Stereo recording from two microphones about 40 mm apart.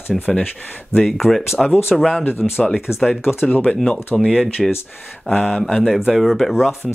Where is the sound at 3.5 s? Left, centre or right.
Left.